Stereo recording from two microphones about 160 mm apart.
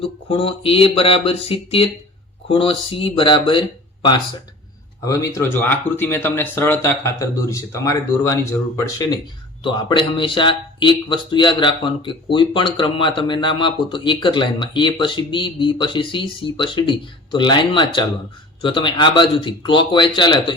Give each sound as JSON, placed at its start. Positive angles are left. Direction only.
{"t": 0.0, "sound": "speech", "side_deg": 35}
{"t": 5.0, "sound": "speech", "side_deg": 20}
{"t": 9.6, "sound": "speech", "side_deg": 30}